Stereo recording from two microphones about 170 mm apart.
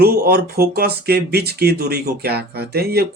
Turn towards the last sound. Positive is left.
turn(degrees=-65)  # may be behind; listen again after turning